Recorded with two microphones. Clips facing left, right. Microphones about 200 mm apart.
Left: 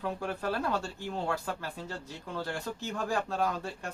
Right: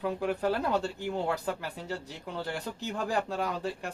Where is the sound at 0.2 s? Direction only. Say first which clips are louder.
Right 4 dB; 15° right (ahead or behind).